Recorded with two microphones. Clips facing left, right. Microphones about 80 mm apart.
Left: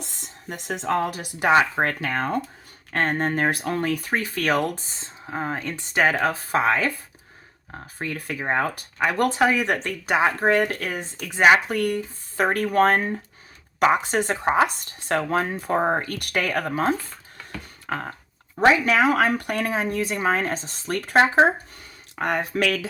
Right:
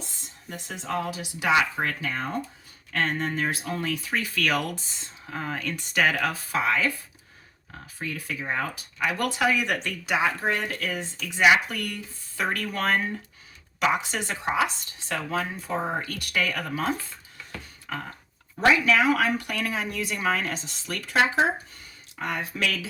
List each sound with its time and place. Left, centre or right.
0.0 s speech: left
2.0 s speech: left
2.9 s speech: left
17.8 s a sound: left
18.5 s speech: left